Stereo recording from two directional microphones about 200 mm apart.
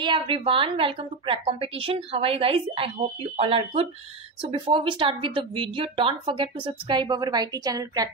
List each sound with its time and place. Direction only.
0.0 s a woman's voice: 25° right (ahead or behind)